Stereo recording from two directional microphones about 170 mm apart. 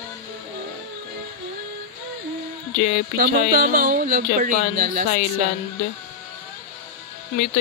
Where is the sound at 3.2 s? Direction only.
60° right (ahead or behind).